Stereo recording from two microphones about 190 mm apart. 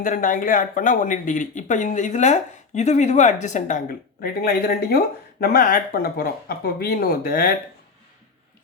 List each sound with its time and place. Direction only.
0.0 s speech: 45° left (ahead or behind)